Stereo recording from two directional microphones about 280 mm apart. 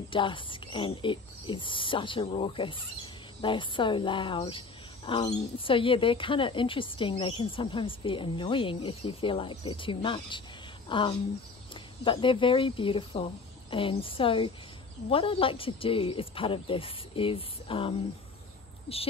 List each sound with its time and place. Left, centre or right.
0.1 s speech: centre